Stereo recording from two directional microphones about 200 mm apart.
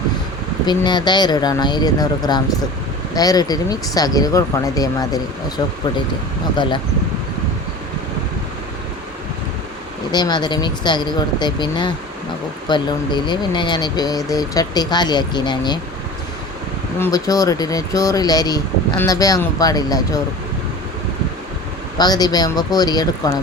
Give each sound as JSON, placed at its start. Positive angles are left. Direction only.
{"t": 0.6, "sound": "speech", "side_deg": 20}
{"t": 10.1, "sound": "speech", "side_deg": 20}
{"t": 17.0, "sound": "speech", "side_deg": 15}
{"t": 21.9, "sound": "speech", "side_deg": 20}